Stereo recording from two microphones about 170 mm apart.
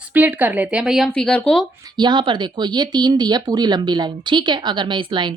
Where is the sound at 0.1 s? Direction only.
10° right (ahead or behind); by 1.6 s 5° left (ahead or behind).